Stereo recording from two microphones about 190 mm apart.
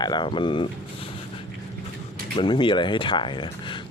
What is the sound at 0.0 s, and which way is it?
Speech, 25° left (ahead or behind).